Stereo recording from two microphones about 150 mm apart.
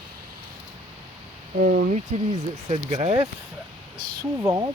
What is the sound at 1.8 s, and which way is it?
Speech, 65° right (ahead or behind).